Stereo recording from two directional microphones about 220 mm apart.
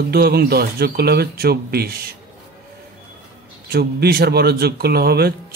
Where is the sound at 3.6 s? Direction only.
45° right (ahead or behind).